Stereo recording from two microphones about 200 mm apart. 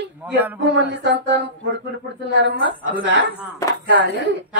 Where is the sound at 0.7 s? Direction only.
65° right (ahead or behind).